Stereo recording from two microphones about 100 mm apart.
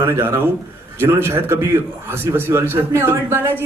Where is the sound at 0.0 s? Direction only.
25° right (ahead or behind).